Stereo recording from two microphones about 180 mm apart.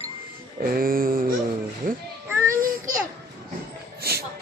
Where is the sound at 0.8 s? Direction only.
50° right (ahead or behind).